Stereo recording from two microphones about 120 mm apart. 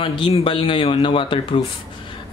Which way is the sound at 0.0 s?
45° left (ahead or behind).